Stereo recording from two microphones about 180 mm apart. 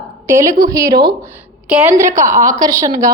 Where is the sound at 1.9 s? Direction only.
15° right (ahead or behind).